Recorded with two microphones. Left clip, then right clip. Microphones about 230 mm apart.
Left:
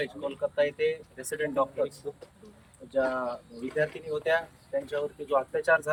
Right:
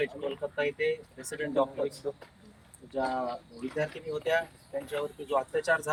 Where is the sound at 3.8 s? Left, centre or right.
Centre.